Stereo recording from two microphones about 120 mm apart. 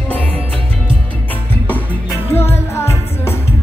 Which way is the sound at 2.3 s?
15° left (ahead or behind).